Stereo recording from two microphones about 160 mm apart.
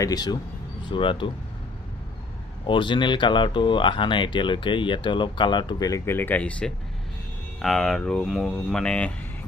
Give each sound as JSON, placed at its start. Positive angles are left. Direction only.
{"t": 0.0, "sound": "speech", "side_deg": 25}
{"t": 2.6, "sound": "speech", "side_deg": 30}